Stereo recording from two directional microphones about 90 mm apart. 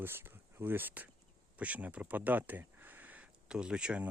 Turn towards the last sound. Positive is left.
turn(degrees=-10)  # may be behind; listen again after turning